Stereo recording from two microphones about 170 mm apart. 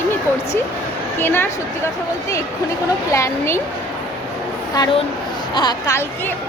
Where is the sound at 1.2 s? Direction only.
10° left (ahead or behind).